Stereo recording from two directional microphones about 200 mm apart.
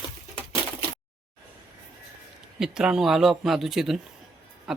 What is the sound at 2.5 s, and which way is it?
A man's voice, 5° right (ahead or behind).